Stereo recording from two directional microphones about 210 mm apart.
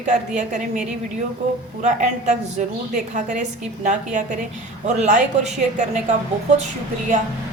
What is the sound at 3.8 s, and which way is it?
Speech, 35° right (ahead or behind).